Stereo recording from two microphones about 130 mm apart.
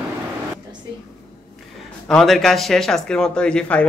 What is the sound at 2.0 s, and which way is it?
A man's voice, 5° left (ahead or behind).